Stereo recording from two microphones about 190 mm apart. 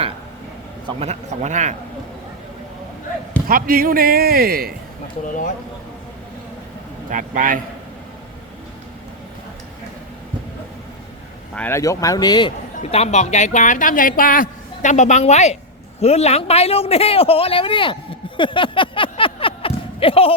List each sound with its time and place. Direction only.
0.9 s speech: 30° right (ahead or behind)
3.4 s a man's voice: 50° right (ahead or behind)
5.3 s speech: 45° left (ahead or behind)
7.1 s a man's voice: 45° right (ahead or behind)
11.5 s a man's voice: 10° left (ahead or behind)
12.8 s speech: 35° left (ahead or behind)
18.3 s a sound: 25° left (ahead or behind)